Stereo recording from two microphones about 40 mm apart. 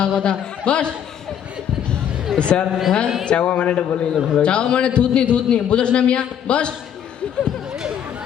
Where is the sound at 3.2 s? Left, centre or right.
Left.